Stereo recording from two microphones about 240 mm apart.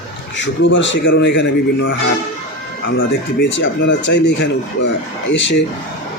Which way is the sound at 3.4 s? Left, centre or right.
Left.